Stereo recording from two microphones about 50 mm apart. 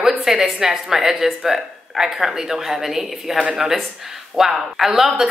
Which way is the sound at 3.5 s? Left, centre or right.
Centre.